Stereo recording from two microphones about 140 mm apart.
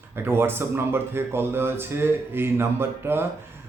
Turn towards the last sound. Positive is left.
turn(degrees=-15)  # may be behind; listen again after turning